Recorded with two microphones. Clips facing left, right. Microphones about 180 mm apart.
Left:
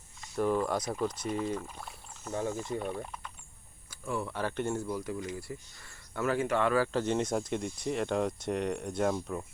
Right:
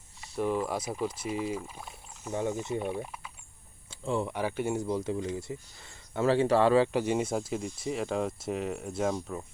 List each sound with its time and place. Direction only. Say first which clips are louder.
0.2 s speech: left 1 dB; 5° right (ahead or behind)
2.3 s speech: right 2 dB; 20° right (ahead or behind)
3.8 s speech: right 4 dB; 25° right (ahead or behind)
4.9 s speech: right 4 dB; 25° right (ahead or behind)
6.9 s speech: right 1 dB; 10° right (ahead or behind)